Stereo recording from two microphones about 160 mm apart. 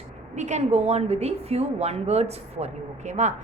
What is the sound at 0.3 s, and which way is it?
A woman's voice, 45° right (ahead or behind).